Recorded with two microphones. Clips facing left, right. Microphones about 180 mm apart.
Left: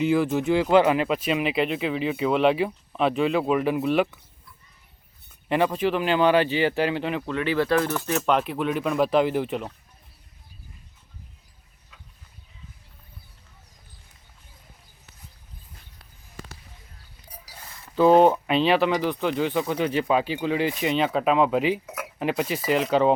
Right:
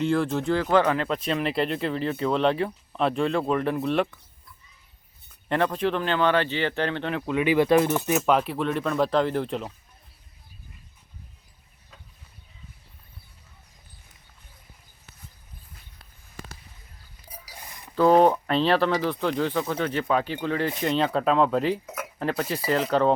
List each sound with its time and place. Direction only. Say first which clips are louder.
0.0 s speech: left 2 dB; 5° left (ahead or behind)
5.5 s speech: left 2 dB; 5° left (ahead or behind)
7.3 s speech: right 4 dB; 15° right (ahead or behind)
8.1 s speech: left 1 dB; 5° right (ahead or behind)
17.2 s a sound: right 1 dB; 15° right (ahead or behind)
18.3 s speech: left 1 dB; 10° left (ahead or behind)
19.8 s speech: left 3 dB; 15° left (ahead or behind)